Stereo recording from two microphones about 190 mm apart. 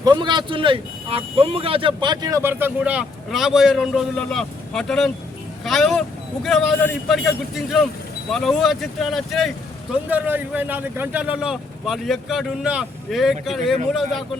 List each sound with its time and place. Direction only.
0.0 s speech: 25° right (ahead or behind); by 14.3 s centre (ahead or behind)